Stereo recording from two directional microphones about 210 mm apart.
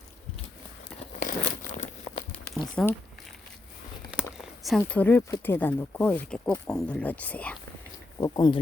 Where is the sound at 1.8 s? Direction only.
25° left (ahead or behind).